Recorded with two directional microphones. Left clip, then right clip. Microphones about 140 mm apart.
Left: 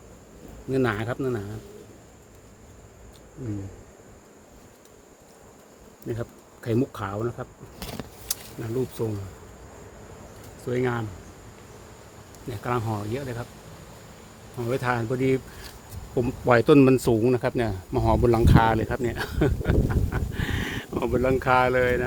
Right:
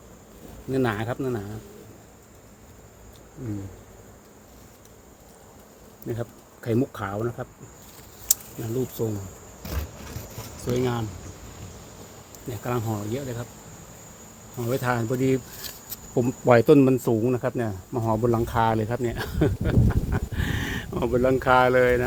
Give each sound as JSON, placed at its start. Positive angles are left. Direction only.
{"t": 0.7, "sound": "speech", "side_deg": 15}
{"t": 6.1, "sound": "speech", "side_deg": 0}
{"t": 8.7, "sound": "speech", "side_deg": 0}
{"t": 12.5, "sound": "speech", "side_deg": -5}
{"t": 14.6, "sound": "speech", "side_deg": -20}
{"t": 16.8, "sound": "speech", "side_deg": 15}
{"t": 17.9, "sound": "speech", "side_deg": 35}
{"t": 18.5, "sound": "speech", "side_deg": 5}